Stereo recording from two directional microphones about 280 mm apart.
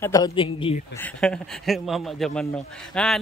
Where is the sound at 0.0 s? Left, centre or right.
Centre.